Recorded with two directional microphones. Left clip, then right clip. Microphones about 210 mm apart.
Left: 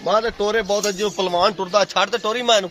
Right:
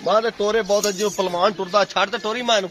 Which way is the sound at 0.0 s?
25° left (ahead or behind).